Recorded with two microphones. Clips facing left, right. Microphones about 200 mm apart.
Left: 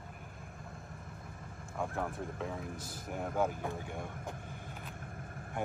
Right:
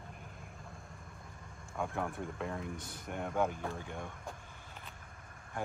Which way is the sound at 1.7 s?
Centre (ahead or behind).